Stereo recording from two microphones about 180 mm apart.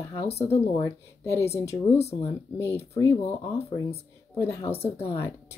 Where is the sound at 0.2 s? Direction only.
35° left (ahead or behind).